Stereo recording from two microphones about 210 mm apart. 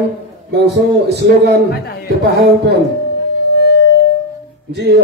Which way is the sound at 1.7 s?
50° left (ahead or behind).